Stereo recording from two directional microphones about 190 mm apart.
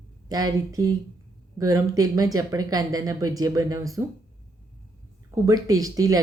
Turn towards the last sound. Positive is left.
turn(degrees=-20)  # may be behind; listen again after turning